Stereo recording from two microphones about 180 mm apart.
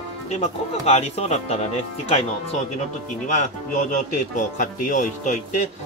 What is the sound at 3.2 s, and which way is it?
Speech, 45° left (ahead or behind).